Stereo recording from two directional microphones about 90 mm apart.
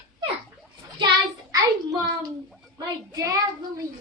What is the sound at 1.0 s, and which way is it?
Child singing, 50° right (ahead or behind).